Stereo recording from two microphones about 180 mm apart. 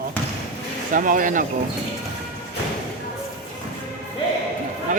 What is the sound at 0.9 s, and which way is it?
Speech, 50° right (ahead or behind).